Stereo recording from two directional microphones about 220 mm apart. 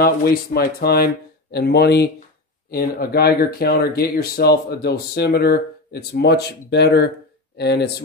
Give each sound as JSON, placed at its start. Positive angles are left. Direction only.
{"t": 0.0, "sound": "speech", "side_deg": 45}